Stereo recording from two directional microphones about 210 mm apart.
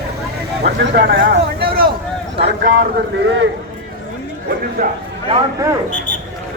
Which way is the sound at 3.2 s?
55° right (ahead or behind).